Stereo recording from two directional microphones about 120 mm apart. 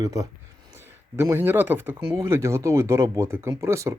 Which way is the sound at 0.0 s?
30° right (ahead or behind).